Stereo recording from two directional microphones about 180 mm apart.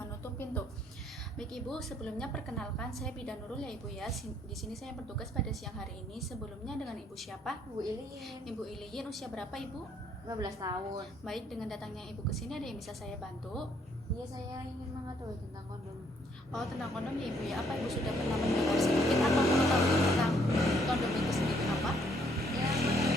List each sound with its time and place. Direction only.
0.0 s music: 10° left (ahead or behind)
1.4 s speech: 5° left (ahead or behind)
10.2 s a woman's voice: 20° right (ahead or behind)
11.3 s speech: centre (ahead or behind)
16.5 s speech: centre (ahead or behind)
20.6 s vehicle: centre (ahead or behind)